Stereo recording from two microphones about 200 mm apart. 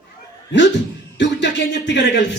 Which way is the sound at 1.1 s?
60° left (ahead or behind).